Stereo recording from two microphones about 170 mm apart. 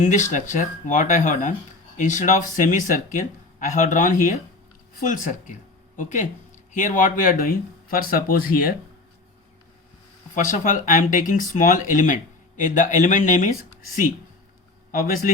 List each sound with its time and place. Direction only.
0.0 s speech: 45° left (ahead or behind)
10.3 s speech: 50° left (ahead or behind)
14.9 s speech: 55° left (ahead or behind)